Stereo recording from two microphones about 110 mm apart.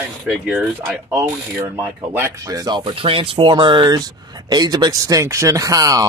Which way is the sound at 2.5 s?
35° right (ahead or behind).